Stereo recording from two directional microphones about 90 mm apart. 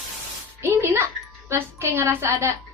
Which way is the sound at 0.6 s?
30° right (ahead or behind).